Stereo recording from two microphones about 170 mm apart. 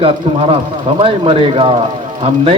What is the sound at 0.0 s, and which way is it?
Speech, 35° right (ahead or behind).